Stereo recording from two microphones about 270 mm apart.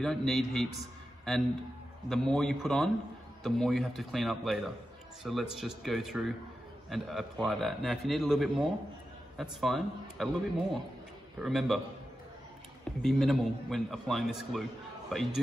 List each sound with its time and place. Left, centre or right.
0.0 s a man's voice: centre
13.0 s a man's voice: centre